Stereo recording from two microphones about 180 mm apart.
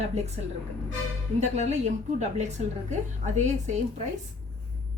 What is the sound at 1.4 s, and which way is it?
A woman's voice, 40° right (ahead or behind).